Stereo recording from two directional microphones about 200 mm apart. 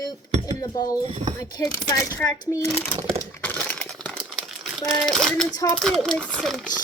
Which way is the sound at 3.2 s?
10° left (ahead or behind).